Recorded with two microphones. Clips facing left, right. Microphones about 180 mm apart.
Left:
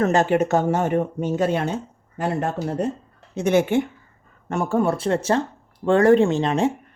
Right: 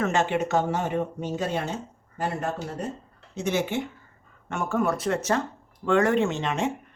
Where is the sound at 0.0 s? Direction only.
40° left (ahead or behind); by 3.8 s 55° left (ahead or behind).